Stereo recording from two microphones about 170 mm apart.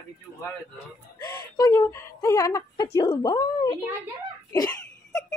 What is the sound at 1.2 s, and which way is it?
A woman's voice, 25° left (ahead or behind).